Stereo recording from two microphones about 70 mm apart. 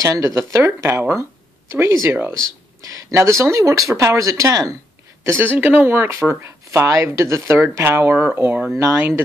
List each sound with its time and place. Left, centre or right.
0.0 s speech: right
2.8 s a sound: right
3.2 s speech: right
5.2 s speech: right